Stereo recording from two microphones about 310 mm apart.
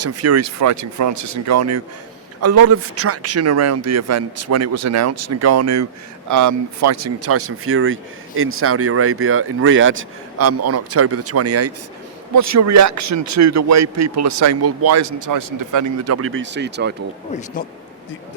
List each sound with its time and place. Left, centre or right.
0.0 s a man's voice: right
12.3 s a man's voice: right